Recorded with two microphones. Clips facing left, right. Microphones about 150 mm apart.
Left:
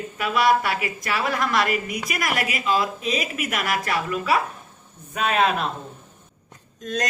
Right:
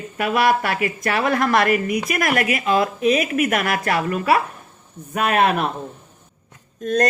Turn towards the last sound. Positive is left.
turn(degrees=-55)  # may be behind; listen again after turning